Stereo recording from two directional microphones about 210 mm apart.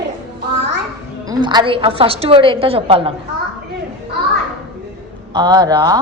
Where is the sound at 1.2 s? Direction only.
20° right (ahead or behind).